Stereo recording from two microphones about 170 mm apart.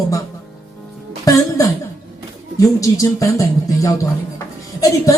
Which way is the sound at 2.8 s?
20° left (ahead or behind).